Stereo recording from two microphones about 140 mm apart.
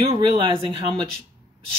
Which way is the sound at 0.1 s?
35° right (ahead or behind).